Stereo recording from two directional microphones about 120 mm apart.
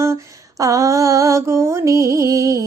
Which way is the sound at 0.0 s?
25° right (ahead or behind).